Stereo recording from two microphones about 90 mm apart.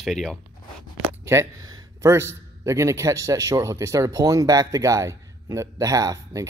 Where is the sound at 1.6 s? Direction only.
45° right (ahead or behind).